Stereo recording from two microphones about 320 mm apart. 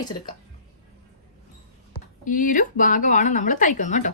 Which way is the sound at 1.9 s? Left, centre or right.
Left.